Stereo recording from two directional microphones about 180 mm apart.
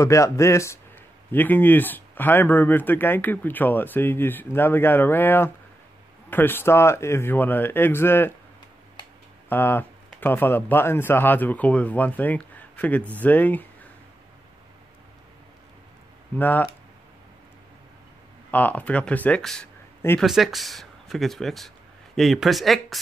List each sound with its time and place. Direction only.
0.0 s speech: 15° left (ahead or behind)
9.5 s speech: 10° left (ahead or behind)
16.3 s speech: 10° left (ahead or behind)
18.5 s speech: 10° left (ahead or behind)
20.2 s speech: centre (ahead or behind)